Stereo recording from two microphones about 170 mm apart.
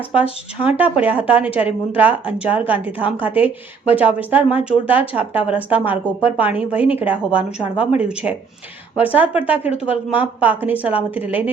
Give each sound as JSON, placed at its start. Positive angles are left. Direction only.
{"t": 0.1, "sound": "a woman's voice", "side_deg": -10}